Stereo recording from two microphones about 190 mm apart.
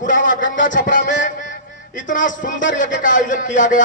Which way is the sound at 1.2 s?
45° left (ahead or behind).